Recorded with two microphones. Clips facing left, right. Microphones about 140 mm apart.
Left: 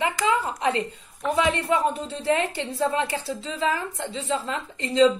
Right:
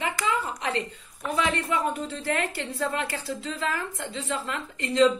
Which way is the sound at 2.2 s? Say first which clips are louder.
Left 6 dB; 20° left (ahead or behind).